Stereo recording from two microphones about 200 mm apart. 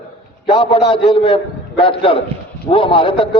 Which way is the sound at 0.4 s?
25° left (ahead or behind).